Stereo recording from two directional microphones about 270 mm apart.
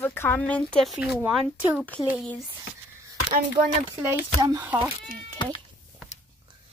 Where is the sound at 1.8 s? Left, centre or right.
Centre.